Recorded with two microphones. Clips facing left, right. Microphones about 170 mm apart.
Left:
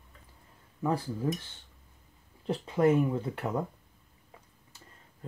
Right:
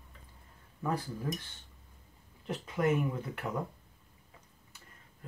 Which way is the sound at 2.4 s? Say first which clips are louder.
Left 5 dB; 30° left (ahead or behind).